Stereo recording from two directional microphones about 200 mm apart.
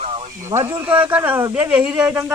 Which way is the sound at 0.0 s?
30° right (ahead or behind).